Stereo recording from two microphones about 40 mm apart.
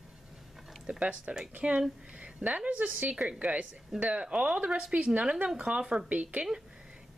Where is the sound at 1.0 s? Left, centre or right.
Right.